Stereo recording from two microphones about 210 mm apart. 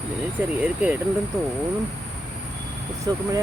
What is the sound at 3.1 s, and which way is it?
Speech, 20° right (ahead or behind).